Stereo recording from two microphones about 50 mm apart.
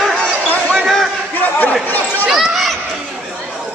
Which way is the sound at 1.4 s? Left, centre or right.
Left.